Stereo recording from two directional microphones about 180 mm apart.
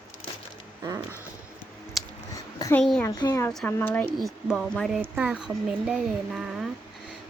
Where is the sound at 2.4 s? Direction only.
20° left (ahead or behind).